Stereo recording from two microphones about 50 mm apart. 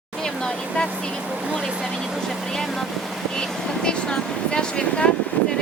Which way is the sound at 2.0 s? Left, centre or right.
Centre.